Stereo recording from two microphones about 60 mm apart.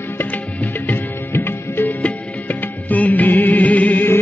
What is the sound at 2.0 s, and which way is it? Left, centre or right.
Music, left.